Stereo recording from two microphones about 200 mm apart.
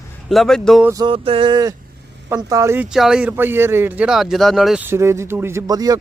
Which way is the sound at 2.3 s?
15° right (ahead or behind).